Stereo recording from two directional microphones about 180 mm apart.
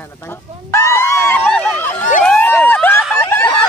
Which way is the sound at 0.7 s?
15° left (ahead or behind).